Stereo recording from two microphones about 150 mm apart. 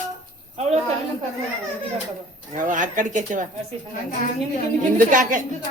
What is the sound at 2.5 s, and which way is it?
Speech, 60° right (ahead or behind).